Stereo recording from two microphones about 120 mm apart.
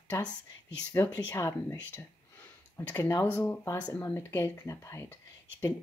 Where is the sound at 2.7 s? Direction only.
20° left (ahead or behind).